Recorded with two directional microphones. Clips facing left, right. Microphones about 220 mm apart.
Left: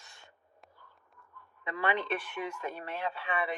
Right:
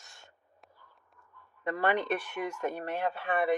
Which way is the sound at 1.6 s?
45° right (ahead or behind).